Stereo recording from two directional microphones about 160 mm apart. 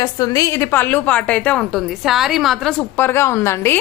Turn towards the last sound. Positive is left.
turn(degrees=15)  # may be behind; listen again after turning